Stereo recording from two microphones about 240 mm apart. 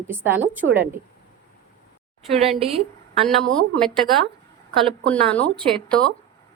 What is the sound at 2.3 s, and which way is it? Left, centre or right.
Speech, right.